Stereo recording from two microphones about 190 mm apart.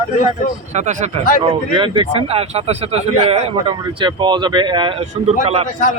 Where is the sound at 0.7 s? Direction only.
40° right (ahead or behind).